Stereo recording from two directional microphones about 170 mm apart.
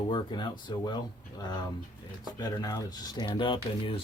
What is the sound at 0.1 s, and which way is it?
Speech, 25° left (ahead or behind).